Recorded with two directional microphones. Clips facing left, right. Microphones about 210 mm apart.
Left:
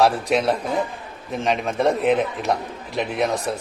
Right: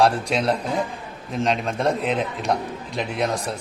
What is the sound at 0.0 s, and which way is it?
A man's voice, centre (ahead or behind).